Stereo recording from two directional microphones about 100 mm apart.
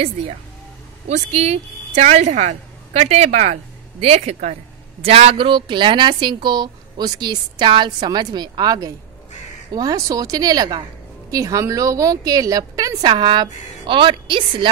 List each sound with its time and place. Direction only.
1.0 s a woman's voice: 90° right
5.0 s a woman's voice: 80° right; by 13.1 s 40° right (ahead or behind)
13.1 s a woman's voice: 55° right (ahead or behind)